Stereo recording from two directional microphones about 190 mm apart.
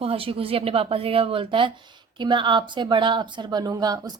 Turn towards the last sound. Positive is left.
turn(degrees=-20)  # may be behind; listen again after turning